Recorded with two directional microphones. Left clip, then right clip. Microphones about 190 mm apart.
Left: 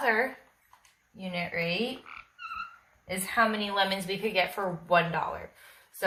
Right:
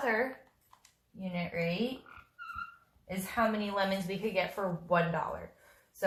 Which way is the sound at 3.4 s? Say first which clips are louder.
Left 5 dB; 30° left (ahead or behind).